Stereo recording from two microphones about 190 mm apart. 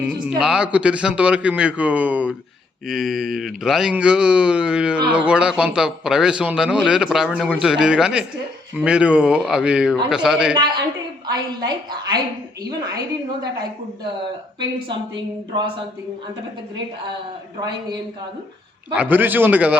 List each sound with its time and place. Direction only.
0.0 s a man's voice: 5° right (ahead or behind)
10.5 s speech: 25° right (ahead or behind)
14.6 s speech: 25° right (ahead or behind)
18.9 s a man's voice: 10° right (ahead or behind)